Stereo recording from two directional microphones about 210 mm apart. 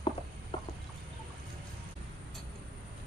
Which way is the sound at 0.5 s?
25° left (ahead or behind).